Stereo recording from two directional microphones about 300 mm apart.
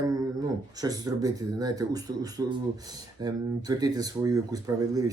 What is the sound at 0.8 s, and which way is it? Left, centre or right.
Speech, centre.